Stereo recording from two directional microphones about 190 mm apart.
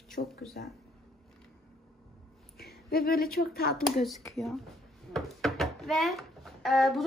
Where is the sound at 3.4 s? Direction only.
55° left (ahead or behind).